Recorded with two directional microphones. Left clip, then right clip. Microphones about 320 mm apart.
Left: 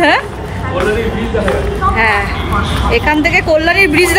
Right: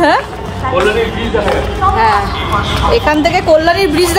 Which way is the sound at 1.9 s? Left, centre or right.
Centre.